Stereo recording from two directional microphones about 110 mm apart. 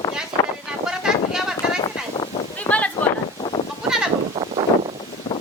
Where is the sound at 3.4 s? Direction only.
50° left (ahead or behind).